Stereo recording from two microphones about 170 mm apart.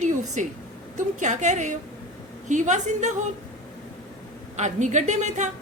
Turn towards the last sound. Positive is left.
turn(degrees=-45)  # may be behind; listen again after turning